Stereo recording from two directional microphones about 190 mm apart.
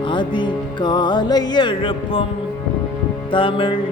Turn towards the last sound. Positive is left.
turn(degrees=25)  # may be behind; listen again after turning